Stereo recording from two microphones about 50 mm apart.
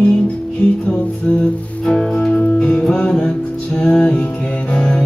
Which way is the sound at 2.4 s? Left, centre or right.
Left.